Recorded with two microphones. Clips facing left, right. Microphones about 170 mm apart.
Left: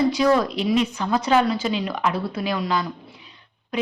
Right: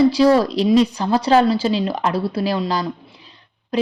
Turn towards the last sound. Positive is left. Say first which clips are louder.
# right 5 dB
turn(degrees=-35)  # may be behind; listen again after turning